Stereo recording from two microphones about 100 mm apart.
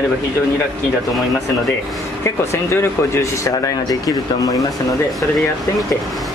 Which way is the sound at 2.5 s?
30° left (ahead or behind).